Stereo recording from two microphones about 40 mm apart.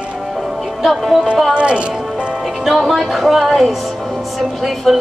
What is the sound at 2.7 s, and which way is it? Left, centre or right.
Speech, centre.